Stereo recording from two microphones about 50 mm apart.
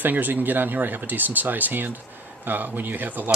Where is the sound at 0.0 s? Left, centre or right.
Right.